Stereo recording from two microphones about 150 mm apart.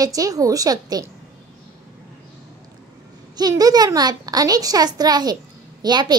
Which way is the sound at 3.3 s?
25° right (ahead or behind).